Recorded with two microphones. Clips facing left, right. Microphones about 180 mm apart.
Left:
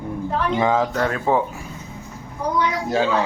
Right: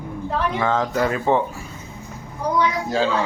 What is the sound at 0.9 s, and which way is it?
Speech, 5° right (ahead or behind).